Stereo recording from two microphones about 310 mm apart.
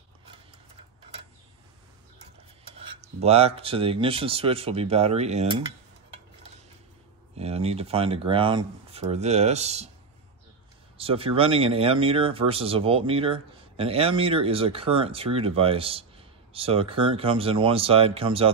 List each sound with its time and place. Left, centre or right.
2.6 s speech: centre
7.3 s speech: centre
11.0 s speech: centre